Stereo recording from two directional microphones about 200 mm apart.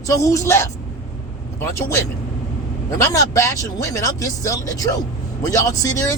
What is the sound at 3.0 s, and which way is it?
Speech, 15° left (ahead or behind).